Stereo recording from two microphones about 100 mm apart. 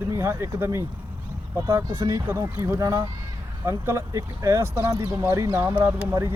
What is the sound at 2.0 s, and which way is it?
Speech, 35° right (ahead or behind).